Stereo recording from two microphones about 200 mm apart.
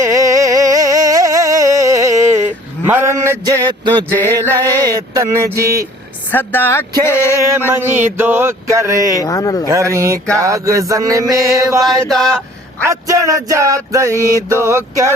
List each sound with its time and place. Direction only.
0.0 s a sound: 15° right (ahead or behind)
4.8 s music: 20° right (ahead or behind)
6.3 s speech: 10° left (ahead or behind)
7.4 s music: 10° right (ahead or behind)
9.1 s speech: 15° left (ahead or behind)
9.6 s music: 15° right (ahead or behind)
12.0 s speech: centre (ahead or behind)
12.9 s music: 15° right (ahead or behind)